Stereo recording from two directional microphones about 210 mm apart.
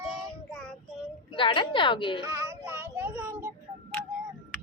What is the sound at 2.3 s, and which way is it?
Child singing, 15° right (ahead or behind).